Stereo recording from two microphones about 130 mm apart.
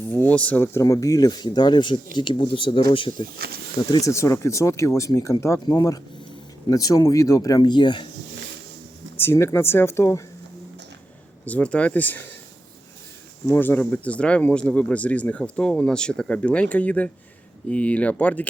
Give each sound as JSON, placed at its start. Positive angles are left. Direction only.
{"t": 0.0, "sound": "speech", "side_deg": 15}
{"t": 9.1, "sound": "speech", "side_deg": 20}
{"t": 11.4, "sound": "speech", "side_deg": 10}
{"t": 13.5, "sound": "speech", "side_deg": 15}